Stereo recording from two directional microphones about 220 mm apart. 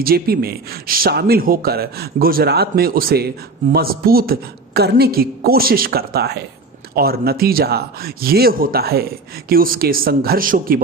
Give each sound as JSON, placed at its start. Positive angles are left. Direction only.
{"t": 0.0, "sound": "speech", "side_deg": -40}